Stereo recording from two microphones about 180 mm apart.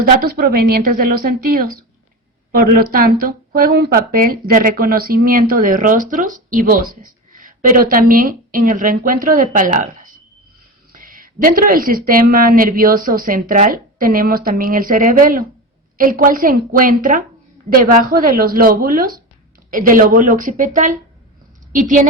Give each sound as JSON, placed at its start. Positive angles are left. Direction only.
{"t": 0.0, "sound": "a woman's voice", "side_deg": -55}